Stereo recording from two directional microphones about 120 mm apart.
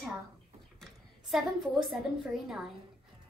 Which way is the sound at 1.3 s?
Centre (ahead or behind).